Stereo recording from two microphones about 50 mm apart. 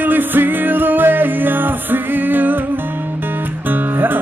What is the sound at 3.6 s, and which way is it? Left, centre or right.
Music, right.